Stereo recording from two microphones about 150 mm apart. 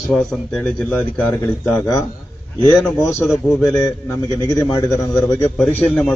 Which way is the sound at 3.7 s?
20° left (ahead or behind).